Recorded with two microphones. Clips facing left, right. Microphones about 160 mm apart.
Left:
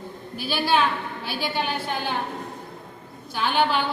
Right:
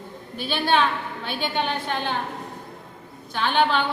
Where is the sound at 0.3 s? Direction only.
5° left (ahead or behind).